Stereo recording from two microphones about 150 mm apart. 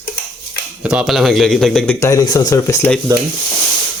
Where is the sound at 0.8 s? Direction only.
5° right (ahead or behind).